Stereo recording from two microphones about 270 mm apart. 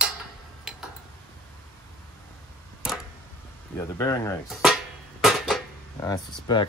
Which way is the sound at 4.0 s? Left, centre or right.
Centre.